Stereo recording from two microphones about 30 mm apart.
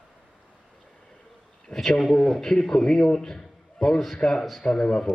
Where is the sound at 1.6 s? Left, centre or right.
Centre.